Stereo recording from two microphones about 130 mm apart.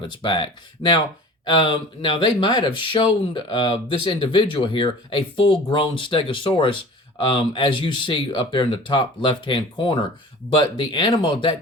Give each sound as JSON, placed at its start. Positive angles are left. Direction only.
{"t": 0.0, "sound": "speech", "side_deg": 40}